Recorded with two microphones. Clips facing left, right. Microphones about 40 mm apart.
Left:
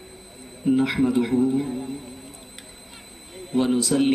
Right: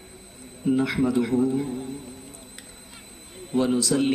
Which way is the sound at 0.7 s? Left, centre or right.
Left.